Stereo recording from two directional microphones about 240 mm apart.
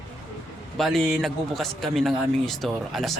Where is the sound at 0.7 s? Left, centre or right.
Centre.